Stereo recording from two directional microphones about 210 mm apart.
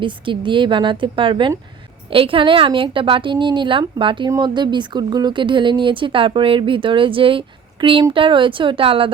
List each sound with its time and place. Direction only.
0.0 s a woman's voice: 25° right (ahead or behind)